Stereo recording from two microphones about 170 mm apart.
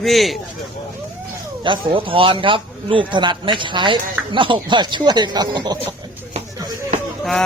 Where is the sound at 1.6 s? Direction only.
30° right (ahead or behind).